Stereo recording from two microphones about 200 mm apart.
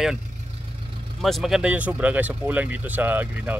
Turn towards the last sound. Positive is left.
turn(degrees=-10)  # may be behind; listen again after turning